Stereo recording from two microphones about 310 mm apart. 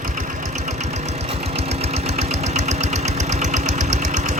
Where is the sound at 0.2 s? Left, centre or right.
Right.